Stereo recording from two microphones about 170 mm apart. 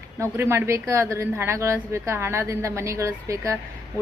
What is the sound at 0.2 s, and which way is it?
A woman's voice, 15° right (ahead or behind).